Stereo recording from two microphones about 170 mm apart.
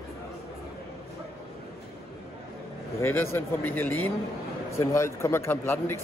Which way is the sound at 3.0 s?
15° left (ahead or behind).